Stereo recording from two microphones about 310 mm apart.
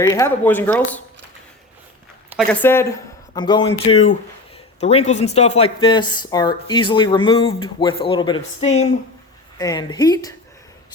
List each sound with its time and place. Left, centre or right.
0.0 s speech: centre
2.3 s speech: centre